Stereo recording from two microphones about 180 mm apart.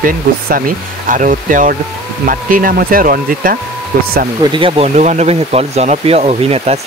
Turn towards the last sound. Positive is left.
turn(degrees=-35)  # may be behind; listen again after turning